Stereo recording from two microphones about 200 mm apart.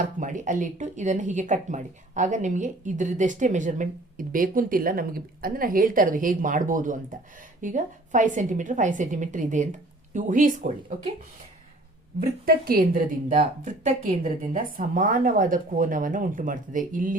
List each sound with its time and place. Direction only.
0.0 s speech: 40° right (ahead or behind)
12.2 s a woman's voice: 50° right (ahead or behind)
13.4 s a woman's voice: 30° right (ahead or behind)